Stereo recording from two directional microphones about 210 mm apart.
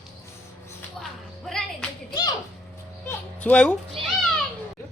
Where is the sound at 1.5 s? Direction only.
5° left (ahead or behind).